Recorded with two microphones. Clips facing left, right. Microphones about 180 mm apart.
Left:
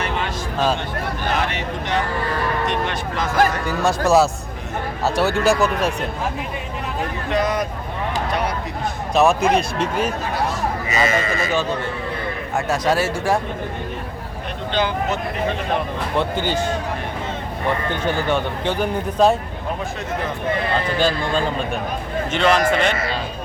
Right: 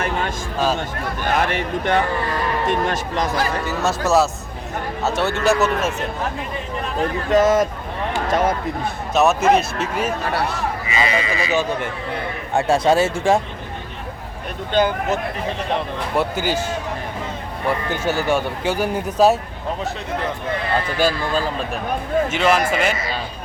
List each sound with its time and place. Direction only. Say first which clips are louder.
1.4 s speech: right 3 dB; 50° right (ahead or behind)
3.7 s speech: left 2 dB; 5° right (ahead or behind)
7.3 s speech: right 6 dB; 45° right (ahead or behind)
9.1 s speech: right 1 dB; 5° right (ahead or behind)
10.8 s speech: left 2 dB; 45° left (ahead or behind)
12.5 s speech: right 4 dB; 30° right (ahead or behind)
16.1 s speech: right 1 dB; 5° right (ahead or behind)
17.7 s speech: right 1 dB; 5° right (ahead or behind)
21.0 s speech: right 1 dB; 5° right (ahead or behind)